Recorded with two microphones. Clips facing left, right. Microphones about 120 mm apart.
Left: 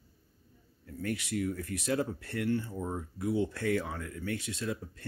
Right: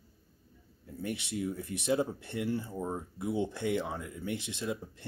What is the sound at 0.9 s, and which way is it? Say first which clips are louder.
Speech: left 2 dB; 20° right (ahead or behind).